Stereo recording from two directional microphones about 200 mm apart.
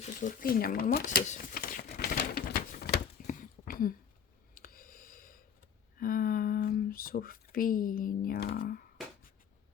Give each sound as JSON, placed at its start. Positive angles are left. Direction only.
{"t": 0.2, "sound": "speech", "side_deg": 45}
{"t": 1.3, "sound": "crumpling", "side_deg": 45}
{"t": 3.2, "sound": "a sound", "side_deg": 45}